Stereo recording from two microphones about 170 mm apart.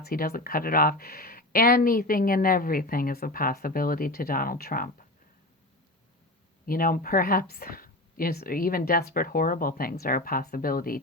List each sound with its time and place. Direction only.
0.0 s speech: 60° left (ahead or behind)
6.7 s speech: 55° left (ahead or behind)